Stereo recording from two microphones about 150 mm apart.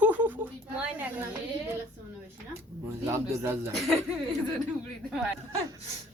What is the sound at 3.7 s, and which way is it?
Speech, centre (ahead or behind).